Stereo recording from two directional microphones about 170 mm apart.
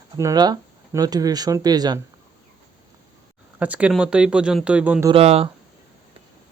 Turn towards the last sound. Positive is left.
turn(degrees=-35)  # may be behind; listen again after turning